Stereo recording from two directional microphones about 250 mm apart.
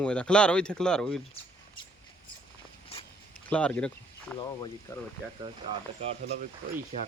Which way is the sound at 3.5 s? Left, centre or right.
Centre.